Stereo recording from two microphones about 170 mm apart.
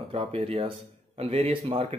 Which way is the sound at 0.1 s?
35° right (ahead or behind).